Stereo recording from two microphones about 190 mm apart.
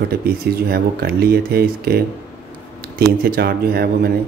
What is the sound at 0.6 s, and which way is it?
Speech, 55° right (ahead or behind).